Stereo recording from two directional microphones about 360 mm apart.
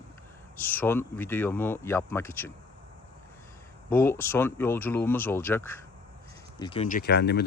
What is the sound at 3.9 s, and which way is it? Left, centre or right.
Speech, centre.